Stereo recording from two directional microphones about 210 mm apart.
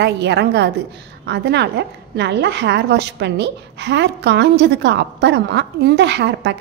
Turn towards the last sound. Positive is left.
turn(degrees=-55)  # may be behind; listen again after turning